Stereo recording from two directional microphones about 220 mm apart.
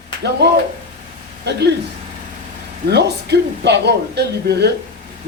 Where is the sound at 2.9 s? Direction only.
50° right (ahead or behind).